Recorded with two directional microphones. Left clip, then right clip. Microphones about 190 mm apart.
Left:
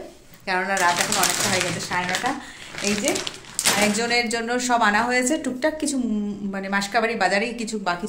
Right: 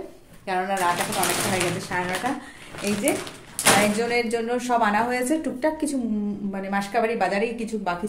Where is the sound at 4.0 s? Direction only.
5° right (ahead or behind).